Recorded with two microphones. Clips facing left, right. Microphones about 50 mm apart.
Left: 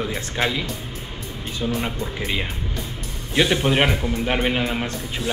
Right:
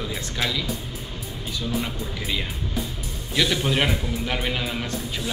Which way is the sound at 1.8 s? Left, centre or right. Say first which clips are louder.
Left 3 dB; left.